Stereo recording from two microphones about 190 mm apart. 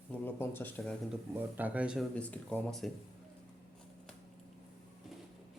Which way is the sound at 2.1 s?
5° left (ahead or behind).